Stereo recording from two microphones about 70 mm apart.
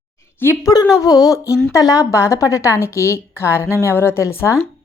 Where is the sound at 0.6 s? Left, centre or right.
Left.